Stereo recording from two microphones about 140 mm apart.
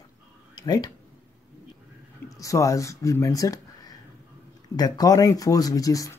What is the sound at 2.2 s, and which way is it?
Speech, 25° left (ahead or behind).